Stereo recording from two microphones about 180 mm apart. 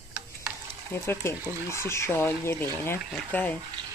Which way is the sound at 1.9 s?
15° left (ahead or behind).